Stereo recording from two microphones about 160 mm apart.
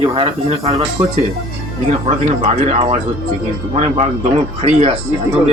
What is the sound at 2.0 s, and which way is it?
Speech, 40° right (ahead or behind).